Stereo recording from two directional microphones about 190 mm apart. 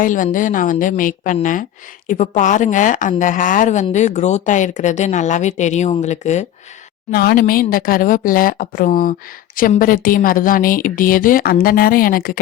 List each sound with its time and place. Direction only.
0.0 s a woman's voice: 45° left (ahead or behind)
7.1 s a woman's voice: 50° left (ahead or behind)